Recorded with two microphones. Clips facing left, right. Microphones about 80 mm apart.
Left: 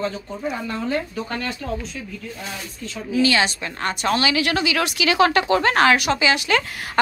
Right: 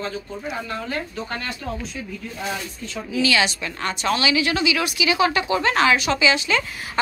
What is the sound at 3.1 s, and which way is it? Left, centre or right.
A woman's voice, left.